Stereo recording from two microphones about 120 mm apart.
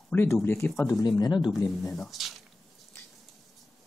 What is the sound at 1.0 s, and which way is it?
Speech, 35° left (ahead or behind).